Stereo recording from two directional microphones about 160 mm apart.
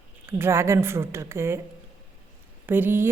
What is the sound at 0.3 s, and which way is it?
A woman's voice, 15° right (ahead or behind).